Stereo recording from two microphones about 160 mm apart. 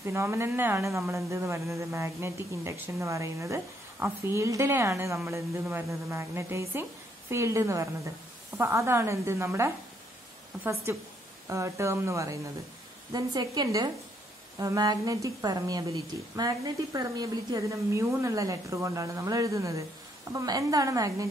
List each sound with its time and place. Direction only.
0.0 s speech: 15° right (ahead or behind)
10.9 s a woman's voice: 15° right (ahead or behind)